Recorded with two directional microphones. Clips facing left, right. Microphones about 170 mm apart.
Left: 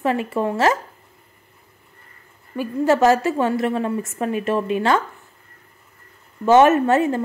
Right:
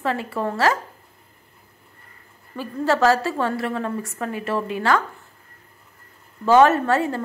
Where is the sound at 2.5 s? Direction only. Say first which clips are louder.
Left 4 dB; 15° left (ahead or behind).